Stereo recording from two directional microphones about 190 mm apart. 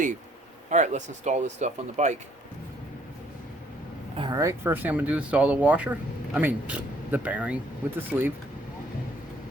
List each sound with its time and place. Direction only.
0.7 s speech: 40° right (ahead or behind)
4.2 s speech: 20° right (ahead or behind)